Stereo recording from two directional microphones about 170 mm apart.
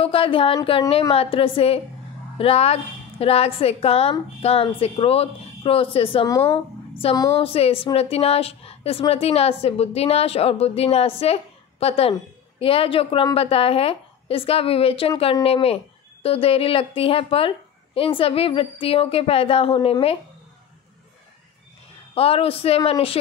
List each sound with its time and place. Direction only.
0.0 s a woman's voice: 30° left (ahead or behind)
22.1 s a woman's voice: 35° left (ahead or behind)